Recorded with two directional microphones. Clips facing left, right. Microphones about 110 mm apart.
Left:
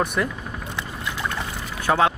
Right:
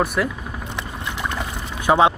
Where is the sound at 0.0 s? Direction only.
5° right (ahead or behind).